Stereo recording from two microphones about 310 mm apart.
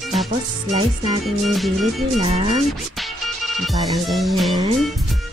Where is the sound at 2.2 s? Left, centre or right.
Centre.